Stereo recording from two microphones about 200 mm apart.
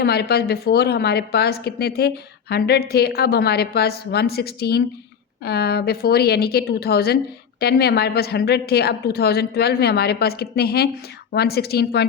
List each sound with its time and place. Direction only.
0.0 s a woman's voice: 55° left (ahead or behind)